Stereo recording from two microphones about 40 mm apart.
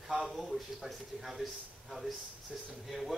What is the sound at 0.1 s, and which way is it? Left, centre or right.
A man's voice, centre.